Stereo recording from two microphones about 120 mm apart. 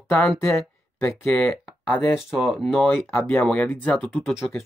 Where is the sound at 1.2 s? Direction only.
5° left (ahead or behind).